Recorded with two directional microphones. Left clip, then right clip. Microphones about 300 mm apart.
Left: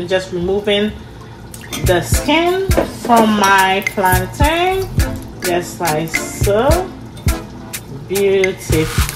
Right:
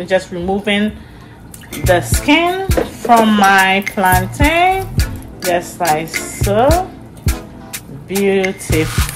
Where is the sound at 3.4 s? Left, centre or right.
Right.